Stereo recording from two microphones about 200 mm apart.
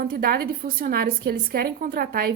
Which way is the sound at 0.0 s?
50° right (ahead or behind).